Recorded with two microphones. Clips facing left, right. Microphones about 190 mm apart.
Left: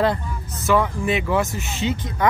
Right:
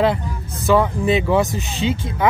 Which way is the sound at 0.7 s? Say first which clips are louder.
Right 4 dB; 15° right (ahead or behind).